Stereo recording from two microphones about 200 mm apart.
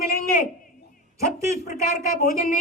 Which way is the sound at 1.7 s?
40° left (ahead or behind).